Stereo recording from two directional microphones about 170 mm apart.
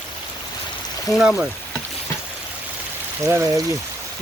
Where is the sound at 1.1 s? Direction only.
Centre (ahead or behind).